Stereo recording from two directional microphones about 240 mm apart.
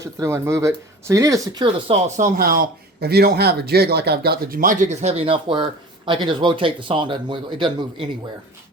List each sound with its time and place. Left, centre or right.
0.0 s speech: centre